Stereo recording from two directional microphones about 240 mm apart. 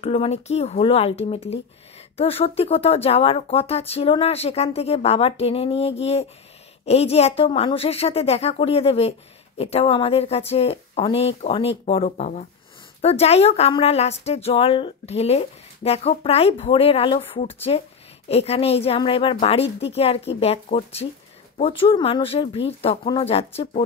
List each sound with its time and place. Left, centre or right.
0.0 s speech: left